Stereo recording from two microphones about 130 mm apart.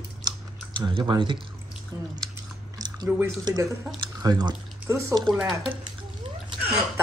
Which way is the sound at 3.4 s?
25° right (ahead or behind).